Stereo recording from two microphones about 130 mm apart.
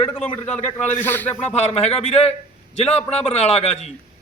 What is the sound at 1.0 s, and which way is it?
Speech, 15° left (ahead or behind).